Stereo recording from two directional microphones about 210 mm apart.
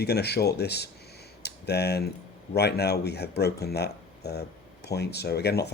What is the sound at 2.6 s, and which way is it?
Speech, 50° left (ahead or behind).